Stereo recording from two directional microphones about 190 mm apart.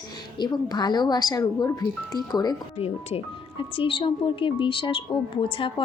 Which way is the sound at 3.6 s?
30° left (ahead or behind).